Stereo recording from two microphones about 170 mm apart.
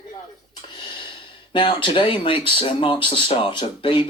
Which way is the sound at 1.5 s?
30° left (ahead or behind).